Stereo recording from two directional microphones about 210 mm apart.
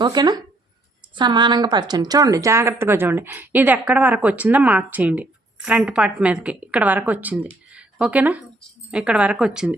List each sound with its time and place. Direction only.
0.0 s a woman's voice: 20° right (ahead or behind)
7.7 s a sound: 5° right (ahead or behind)
8.9 s a woman's voice: 5° right (ahead or behind)